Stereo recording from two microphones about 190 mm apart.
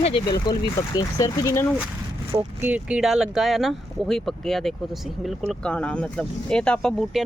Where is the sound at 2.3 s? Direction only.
15° right (ahead or behind).